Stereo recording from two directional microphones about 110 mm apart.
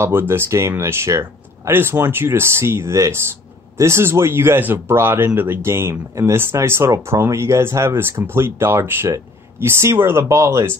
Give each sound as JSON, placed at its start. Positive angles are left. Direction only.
{"t": 0.0, "sound": "speech", "side_deg": -20}